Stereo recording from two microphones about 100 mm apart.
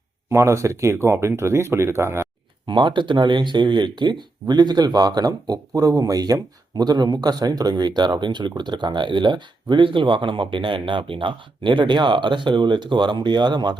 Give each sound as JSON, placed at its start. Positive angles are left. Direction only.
{"t": 0.3, "sound": "speech", "side_deg": -30}
{"t": 2.6, "sound": "speech", "side_deg": -50}